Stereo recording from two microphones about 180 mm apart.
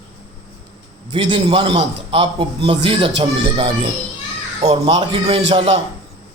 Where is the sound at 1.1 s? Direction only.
25° right (ahead or behind).